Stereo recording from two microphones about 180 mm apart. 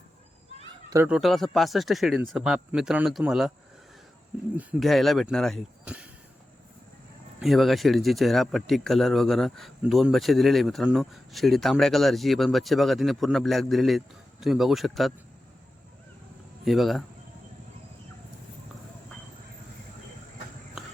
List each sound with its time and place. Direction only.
0.9 s speech: 15° right (ahead or behind)
1.1 s speech: centre (ahead or behind)
4.5 s speech: 5° right (ahead or behind)
7.3 s speech: centre (ahead or behind)
16.6 s speech: centre (ahead or behind)